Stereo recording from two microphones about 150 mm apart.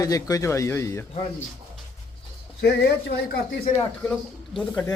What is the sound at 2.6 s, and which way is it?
Speech, 90° left.